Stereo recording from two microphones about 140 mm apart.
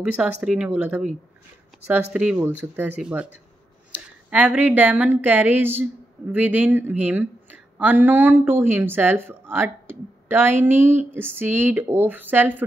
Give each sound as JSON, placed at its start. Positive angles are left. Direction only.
{"t": 0.0, "sound": "speech", "side_deg": -5}